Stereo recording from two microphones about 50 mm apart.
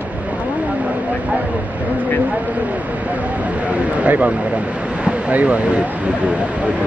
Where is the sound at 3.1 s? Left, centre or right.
Right.